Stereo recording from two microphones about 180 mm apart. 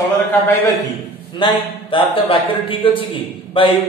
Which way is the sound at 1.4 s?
30° left (ahead or behind).